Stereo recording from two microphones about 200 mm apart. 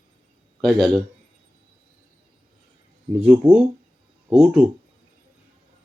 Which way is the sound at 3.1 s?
5° right (ahead or behind).